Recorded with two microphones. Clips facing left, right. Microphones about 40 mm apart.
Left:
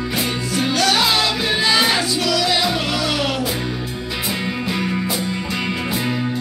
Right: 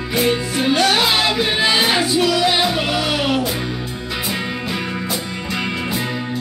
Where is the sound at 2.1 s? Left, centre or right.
Right.